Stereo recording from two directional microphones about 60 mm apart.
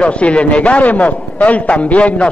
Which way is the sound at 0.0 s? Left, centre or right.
Centre.